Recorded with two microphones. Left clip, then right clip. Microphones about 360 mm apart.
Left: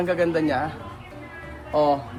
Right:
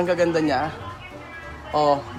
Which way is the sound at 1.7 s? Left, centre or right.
Centre.